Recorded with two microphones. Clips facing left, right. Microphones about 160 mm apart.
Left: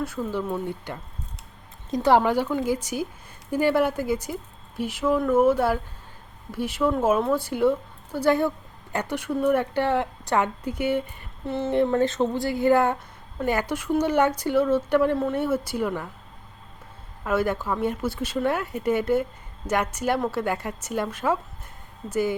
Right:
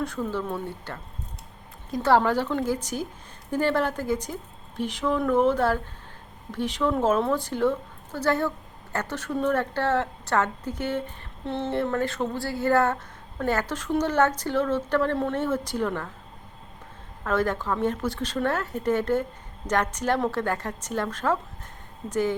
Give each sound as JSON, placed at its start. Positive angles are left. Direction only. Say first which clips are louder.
{"t": 0.0, "sound": "a woman's voice", "louder": "left 1 dB", "side_deg": 10}
{"t": 11.7, "sound": "a woman's voice", "louder": "left 6 dB", "side_deg": 20}
{"t": 17.2, "sound": "a woman's voice", "louder": "left 1 dB", "side_deg": 10}